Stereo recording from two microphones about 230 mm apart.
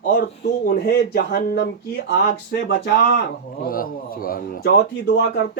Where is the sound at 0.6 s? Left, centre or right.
Left.